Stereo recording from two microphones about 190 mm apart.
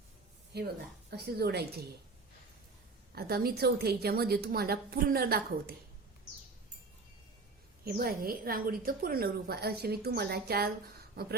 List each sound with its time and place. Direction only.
0.5 s speech: 55° right (ahead or behind)
3.2 s a woman's voice: 55° right (ahead or behind)
7.9 s a woman's voice: 50° right (ahead or behind)